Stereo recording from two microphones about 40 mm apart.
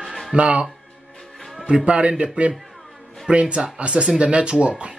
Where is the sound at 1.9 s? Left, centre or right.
Right.